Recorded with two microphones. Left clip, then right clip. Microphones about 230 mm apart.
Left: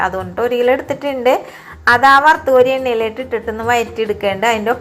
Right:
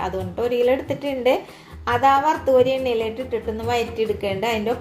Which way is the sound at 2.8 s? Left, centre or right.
Left.